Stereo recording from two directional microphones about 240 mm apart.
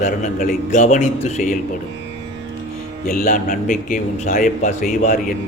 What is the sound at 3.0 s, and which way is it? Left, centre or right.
A man's voice, left.